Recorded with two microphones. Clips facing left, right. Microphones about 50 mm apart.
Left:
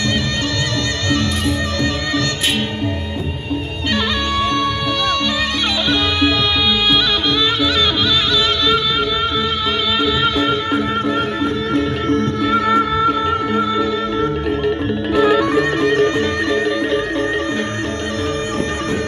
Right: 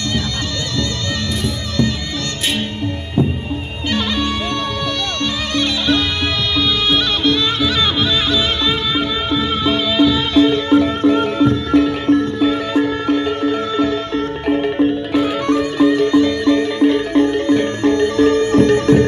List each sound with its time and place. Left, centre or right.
7.6 s music: centre
9.7 s music: centre
10.4 s music: centre
15.8 s music: left
17.8 s music: right